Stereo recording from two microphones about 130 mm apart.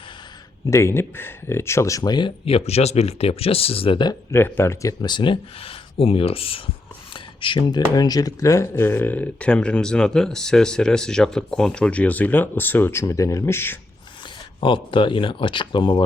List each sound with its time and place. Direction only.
0.7 s speech: 20° left (ahead or behind); by 4.2 s 35° left (ahead or behind)
4.3 s speech: 15° left (ahead or behind)
14.6 s speech: 40° left (ahead or behind)